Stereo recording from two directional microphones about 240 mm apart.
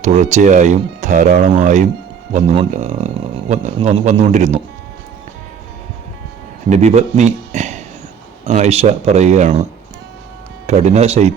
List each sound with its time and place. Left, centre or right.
0.0 s a man's voice: right
6.7 s a man's voice: right
10.7 s a man's voice: right